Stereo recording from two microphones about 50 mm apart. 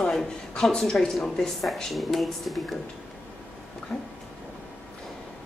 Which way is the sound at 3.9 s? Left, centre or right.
Left.